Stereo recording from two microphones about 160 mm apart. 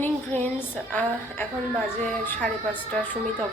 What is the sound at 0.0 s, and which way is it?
A woman's voice, 15° left (ahead or behind).